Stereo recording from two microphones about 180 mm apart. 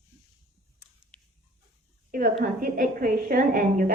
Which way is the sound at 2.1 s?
50° right (ahead or behind).